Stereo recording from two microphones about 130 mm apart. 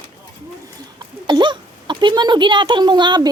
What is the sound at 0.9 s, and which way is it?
Speech, 35° right (ahead or behind).